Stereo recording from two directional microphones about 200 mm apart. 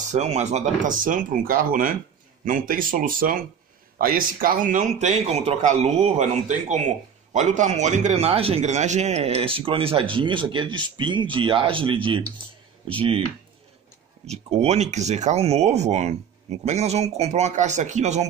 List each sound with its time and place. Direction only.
0.1 s a man's voice: 35° right (ahead or behind)
14.2 s a man's voice: 30° right (ahead or behind)